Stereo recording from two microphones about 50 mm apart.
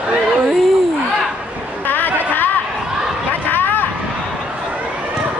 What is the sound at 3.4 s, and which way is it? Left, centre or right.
Vehicle, left.